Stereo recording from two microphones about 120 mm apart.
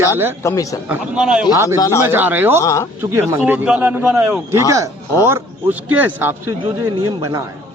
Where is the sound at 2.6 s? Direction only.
25° left (ahead or behind).